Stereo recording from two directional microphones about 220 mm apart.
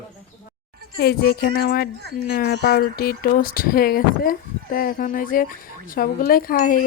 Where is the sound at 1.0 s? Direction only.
50° left (ahead or behind).